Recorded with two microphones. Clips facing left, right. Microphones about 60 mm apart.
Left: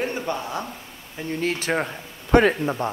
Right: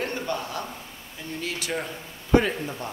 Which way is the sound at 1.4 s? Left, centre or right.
Left.